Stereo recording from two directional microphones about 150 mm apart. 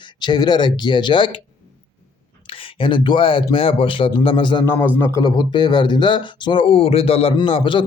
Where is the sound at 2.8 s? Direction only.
35° left (ahead or behind).